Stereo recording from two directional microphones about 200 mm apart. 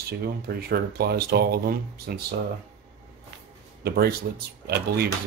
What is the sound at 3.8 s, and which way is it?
Speech, 50° right (ahead or behind).